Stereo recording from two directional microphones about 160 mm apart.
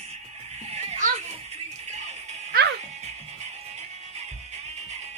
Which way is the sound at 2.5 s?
70° right (ahead or behind).